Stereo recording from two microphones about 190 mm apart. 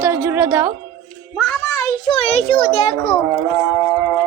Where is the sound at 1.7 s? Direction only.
15° left (ahead or behind).